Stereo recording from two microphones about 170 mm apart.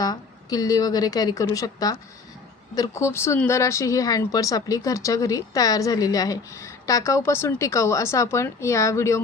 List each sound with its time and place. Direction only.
0.0 s a woman's voice: 20° left (ahead or behind)